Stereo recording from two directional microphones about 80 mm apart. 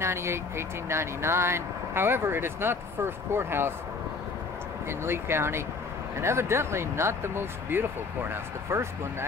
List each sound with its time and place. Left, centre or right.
0.0 s speech: right
4.8 s speech: right